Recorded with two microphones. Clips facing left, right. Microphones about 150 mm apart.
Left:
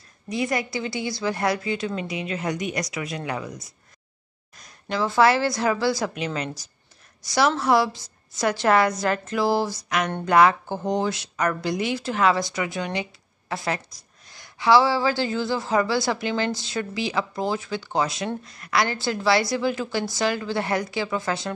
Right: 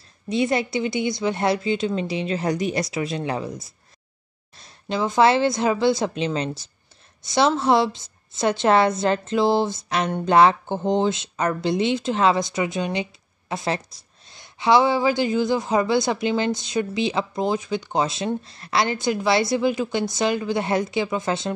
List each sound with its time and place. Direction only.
0.3 s speech: 25° right (ahead or behind)